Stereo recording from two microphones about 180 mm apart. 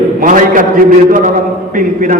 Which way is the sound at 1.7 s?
50° right (ahead or behind).